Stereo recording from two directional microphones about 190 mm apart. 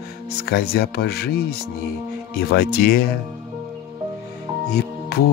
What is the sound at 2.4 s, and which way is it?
Music, 55° left (ahead or behind).